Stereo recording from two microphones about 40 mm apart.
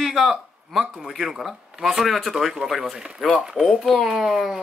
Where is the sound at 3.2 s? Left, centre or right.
Centre.